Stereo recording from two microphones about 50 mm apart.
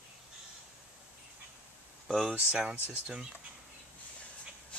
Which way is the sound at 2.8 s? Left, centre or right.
Right.